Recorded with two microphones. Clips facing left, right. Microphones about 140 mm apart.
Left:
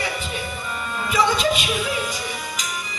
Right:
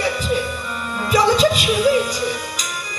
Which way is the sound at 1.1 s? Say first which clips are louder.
Right 5 dB; 35° right (ahead or behind).